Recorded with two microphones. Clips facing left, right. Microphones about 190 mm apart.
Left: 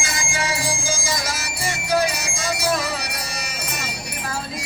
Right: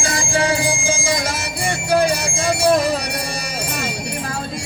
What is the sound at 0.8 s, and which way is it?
Music, 55° right (ahead or behind).